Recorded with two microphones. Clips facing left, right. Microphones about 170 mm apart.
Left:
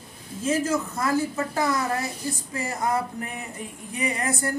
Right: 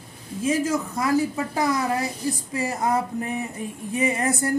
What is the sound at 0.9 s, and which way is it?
A woman's voice, 15° right (ahead or behind).